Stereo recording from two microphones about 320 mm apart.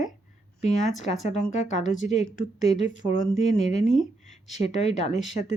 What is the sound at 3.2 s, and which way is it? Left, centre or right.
Speech, left.